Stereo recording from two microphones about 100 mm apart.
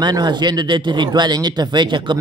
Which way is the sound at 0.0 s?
50° right (ahead or behind).